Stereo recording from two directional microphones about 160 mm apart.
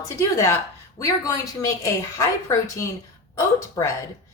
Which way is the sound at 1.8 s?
20° left (ahead or behind).